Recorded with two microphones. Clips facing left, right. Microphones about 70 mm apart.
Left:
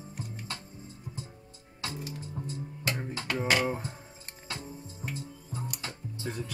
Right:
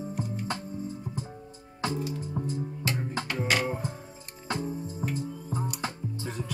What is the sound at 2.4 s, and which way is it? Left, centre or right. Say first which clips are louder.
Music: right 6 dB; centre.